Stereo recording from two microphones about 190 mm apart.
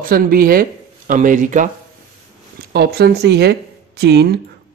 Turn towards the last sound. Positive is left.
turn(degrees=-60)  # may be behind; listen again after turning